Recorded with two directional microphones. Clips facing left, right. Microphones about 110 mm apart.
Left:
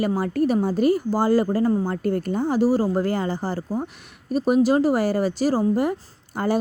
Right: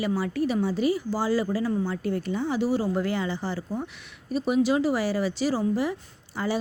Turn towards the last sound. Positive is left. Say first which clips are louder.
# left 5 dB
turn(degrees=50)  # may be behind; listen again after turning